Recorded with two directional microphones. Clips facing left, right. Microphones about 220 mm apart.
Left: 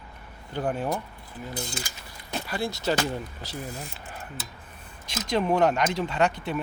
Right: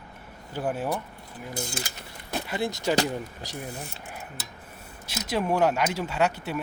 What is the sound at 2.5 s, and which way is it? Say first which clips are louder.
Speech: even; 20° right (ahead or behind).